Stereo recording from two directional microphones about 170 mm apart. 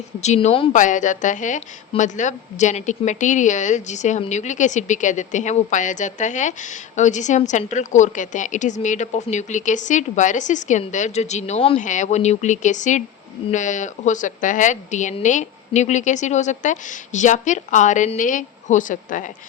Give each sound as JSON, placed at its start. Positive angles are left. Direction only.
{"t": 0.2, "sound": "a woman's voice", "side_deg": 40}
{"t": 0.7, "sound": "a woman's voice", "side_deg": 50}
{"t": 11.8, "sound": "a woman's voice", "side_deg": 45}